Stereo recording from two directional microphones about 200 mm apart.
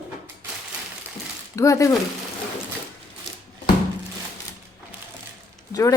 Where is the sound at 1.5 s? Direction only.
15° left (ahead or behind).